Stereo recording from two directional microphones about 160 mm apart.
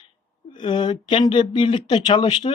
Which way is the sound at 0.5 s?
30° left (ahead or behind).